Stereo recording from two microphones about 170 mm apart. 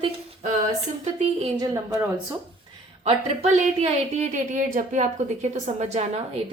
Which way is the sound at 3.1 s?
40° right (ahead or behind).